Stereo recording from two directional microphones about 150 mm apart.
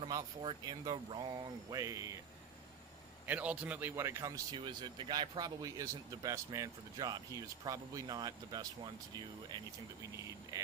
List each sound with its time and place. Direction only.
0.0 s speech: 30° right (ahead or behind)
3.2 s a man's voice: 10° right (ahead or behind)
4.5 s speech: 30° right (ahead or behind)
10.0 s speech: 20° right (ahead or behind)